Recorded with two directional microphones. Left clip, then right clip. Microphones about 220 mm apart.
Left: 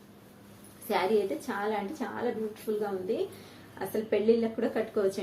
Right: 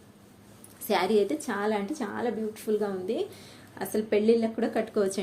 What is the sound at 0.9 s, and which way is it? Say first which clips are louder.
A woman's voice: right 3 dB; 55° right (ahead or behind).